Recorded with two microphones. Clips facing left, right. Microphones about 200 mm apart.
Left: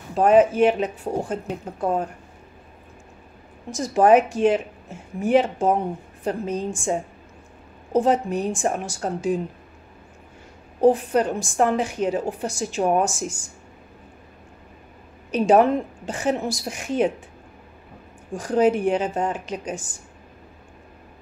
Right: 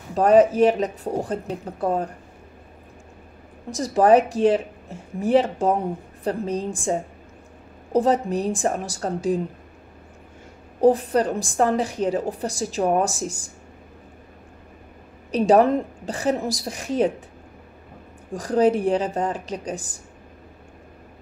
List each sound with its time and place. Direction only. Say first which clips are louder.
0.1 s speech: right 1 dB; 40° right (ahead or behind)
3.7 s speech: even; 35° right (ahead or behind)
10.8 s speech: even; 35° right (ahead or behind)
15.3 s speech: even; 35° right (ahead or behind)
18.3 s speech: even; 35° right (ahead or behind)